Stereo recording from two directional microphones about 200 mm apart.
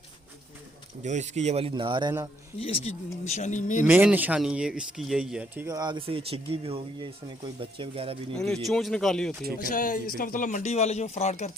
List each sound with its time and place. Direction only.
1.0 s speech: 35° right (ahead or behind)
2.6 s speech: 30° left (ahead or behind)
3.8 s speech: 5° right (ahead or behind)
5.6 s speech: 20° right (ahead or behind)
8.4 s speech: centre (ahead or behind)
9.6 s speech: 45° left (ahead or behind)